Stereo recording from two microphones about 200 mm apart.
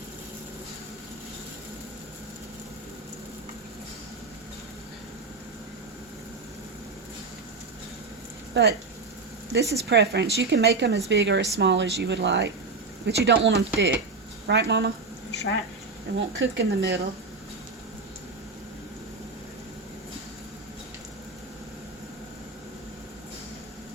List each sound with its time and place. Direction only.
8.6 s speech: 60° right (ahead or behind)
9.9 s speech: 60° right (ahead or behind)
15.3 s a sound: 60° left (ahead or behind)
16.1 s speech: 60° right (ahead or behind)